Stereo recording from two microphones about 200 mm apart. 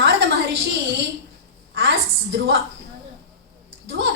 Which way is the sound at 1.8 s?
65° right (ahead or behind).